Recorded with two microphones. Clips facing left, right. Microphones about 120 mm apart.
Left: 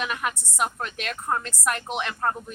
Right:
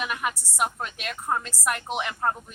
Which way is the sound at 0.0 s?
10° right (ahead or behind).